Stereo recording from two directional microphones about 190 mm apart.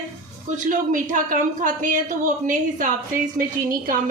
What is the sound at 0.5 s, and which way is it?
A woman's voice, 45° right (ahead or behind).